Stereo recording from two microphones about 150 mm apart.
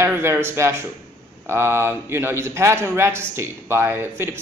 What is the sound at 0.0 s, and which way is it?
A man's voice, 15° right (ahead or behind).